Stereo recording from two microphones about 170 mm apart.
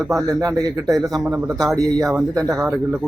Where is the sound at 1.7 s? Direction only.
20° right (ahead or behind).